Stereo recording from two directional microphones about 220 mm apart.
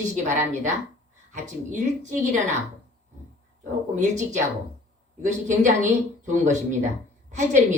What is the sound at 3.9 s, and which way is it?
A woman's voice, 35° right (ahead or behind).